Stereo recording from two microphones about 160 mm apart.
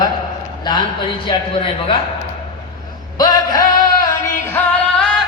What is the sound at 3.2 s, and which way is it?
Music, 25° left (ahead or behind).